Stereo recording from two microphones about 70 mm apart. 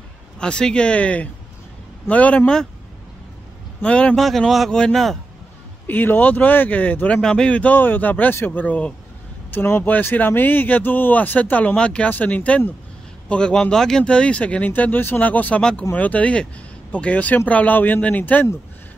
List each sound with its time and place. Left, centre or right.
0.4 s speech: centre
3.8 s speech: centre
4.2 s speech: centre
5.9 s speech: left
7.2 s speech: centre
7.7 s speech: left
8.6 s speech: left
9.5 s speech: left
9.8 s speech: left